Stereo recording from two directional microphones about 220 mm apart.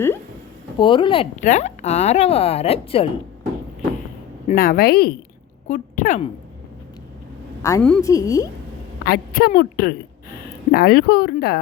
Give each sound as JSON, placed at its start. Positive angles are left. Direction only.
{"t": 0.8, "sound": "speech", "side_deg": 25}
{"t": 4.4, "sound": "a woman's voice", "side_deg": 40}
{"t": 7.6, "sound": "a woman's voice", "side_deg": 10}
{"t": 9.0, "sound": "a woman's voice", "side_deg": 45}